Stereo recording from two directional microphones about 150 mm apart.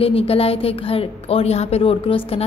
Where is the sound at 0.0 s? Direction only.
40° left (ahead or behind).